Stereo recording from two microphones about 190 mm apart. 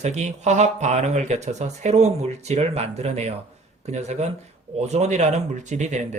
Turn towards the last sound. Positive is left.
turn(degrees=-40)  # may be behind; listen again after turning